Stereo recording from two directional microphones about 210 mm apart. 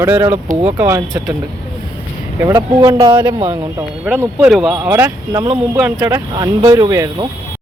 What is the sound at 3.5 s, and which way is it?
Speech, 10° right (ahead or behind).